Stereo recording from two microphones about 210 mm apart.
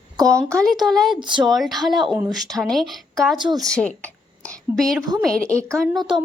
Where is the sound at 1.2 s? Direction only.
20° right (ahead or behind).